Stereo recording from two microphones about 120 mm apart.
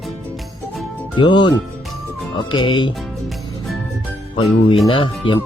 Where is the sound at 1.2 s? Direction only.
40° left (ahead or behind).